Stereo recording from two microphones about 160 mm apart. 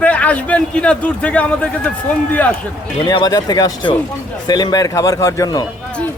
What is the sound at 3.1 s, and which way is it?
A man's voice, 25° left (ahead or behind).